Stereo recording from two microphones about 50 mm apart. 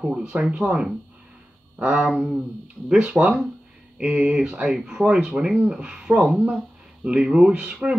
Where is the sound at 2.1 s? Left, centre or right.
Centre.